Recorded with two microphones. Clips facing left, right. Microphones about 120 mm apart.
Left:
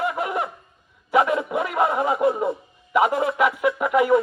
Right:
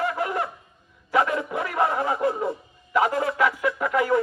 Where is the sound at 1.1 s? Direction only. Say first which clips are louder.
Left 3 dB; 20° left (ahead or behind).